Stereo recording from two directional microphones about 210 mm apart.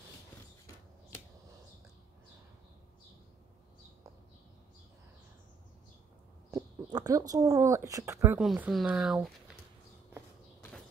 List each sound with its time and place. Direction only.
6.5 s speech: 20° right (ahead or behind)
8.4 s speech: 5° right (ahead or behind)